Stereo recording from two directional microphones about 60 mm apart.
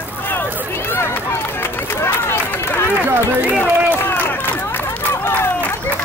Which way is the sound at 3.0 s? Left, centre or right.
Right.